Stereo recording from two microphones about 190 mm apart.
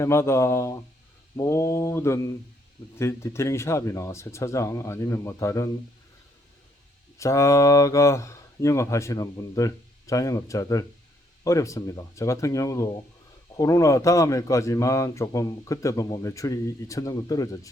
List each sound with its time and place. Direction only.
0.0 s a man's voice: 15° left (ahead or behind)
7.2 s a man's voice: 15° left (ahead or behind)